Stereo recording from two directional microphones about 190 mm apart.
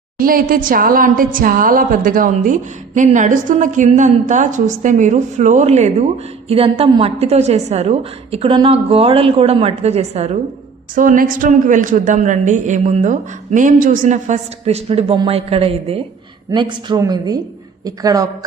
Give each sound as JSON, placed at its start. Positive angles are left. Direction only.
{"t": 0.2, "sound": "a woman's voice", "side_deg": -50}
{"t": 10.9, "sound": "a woman's voice", "side_deg": -45}